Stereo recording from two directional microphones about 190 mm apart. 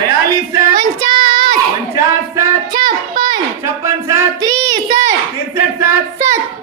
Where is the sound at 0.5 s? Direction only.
20° right (ahead or behind).